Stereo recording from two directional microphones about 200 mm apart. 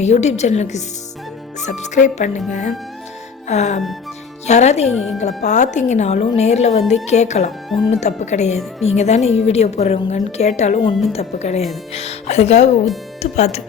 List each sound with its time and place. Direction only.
0.0 s speech: 35° left (ahead or behind)